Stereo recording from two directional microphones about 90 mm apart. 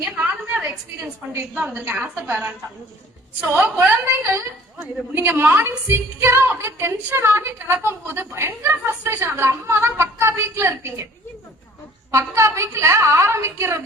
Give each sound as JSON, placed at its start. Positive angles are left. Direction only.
{"t": 1.5, "sound": "a woman's voice", "side_deg": -15}
{"t": 3.5, "sound": "a woman's voice", "side_deg": -25}
{"t": 12.1, "sound": "a woman's voice", "side_deg": -30}